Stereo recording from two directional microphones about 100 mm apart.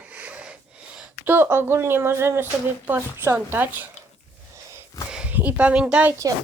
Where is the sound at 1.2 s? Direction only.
20° right (ahead or behind).